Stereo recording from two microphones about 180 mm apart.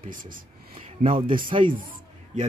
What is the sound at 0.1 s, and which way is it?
Speech, 50° right (ahead or behind).